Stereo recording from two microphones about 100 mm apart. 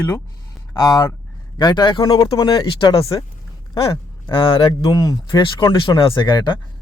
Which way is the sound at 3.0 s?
35° left (ahead or behind).